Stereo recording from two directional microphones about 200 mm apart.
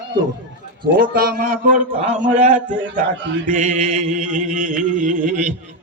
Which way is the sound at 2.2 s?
40° right (ahead or behind).